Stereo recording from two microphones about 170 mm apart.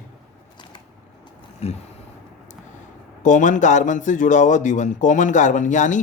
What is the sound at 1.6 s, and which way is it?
Speech, 35° left (ahead or behind).